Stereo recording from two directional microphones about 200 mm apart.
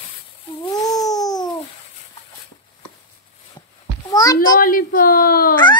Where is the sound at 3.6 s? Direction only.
20° left (ahead or behind).